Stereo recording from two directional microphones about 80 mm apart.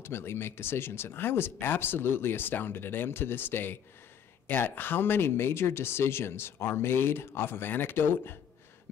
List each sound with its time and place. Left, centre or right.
0.0 s speech: left